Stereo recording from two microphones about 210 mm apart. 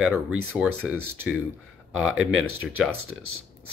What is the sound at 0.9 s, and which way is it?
Speech, 90° right.